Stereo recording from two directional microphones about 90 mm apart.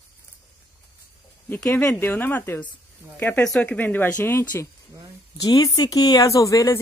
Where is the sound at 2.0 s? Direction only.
20° left (ahead or behind).